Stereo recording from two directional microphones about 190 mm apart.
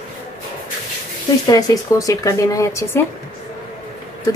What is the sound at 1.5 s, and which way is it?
Speech, 15° left (ahead or behind).